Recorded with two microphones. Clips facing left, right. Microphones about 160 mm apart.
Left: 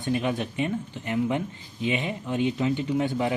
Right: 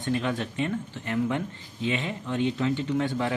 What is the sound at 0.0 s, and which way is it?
Speech, 15° left (ahead or behind).